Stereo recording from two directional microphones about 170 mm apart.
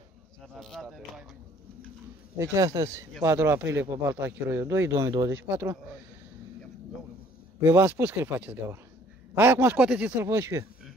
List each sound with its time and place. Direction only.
0.6 s speech: centre (ahead or behind)
2.3 s speech: 15° right (ahead or behind)
7.6 s speech: 15° right (ahead or behind)